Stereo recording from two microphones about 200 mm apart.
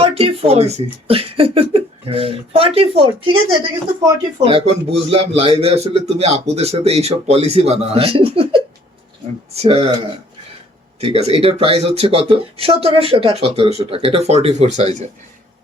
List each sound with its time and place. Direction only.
0.0 s speech: 30° right (ahead or behind)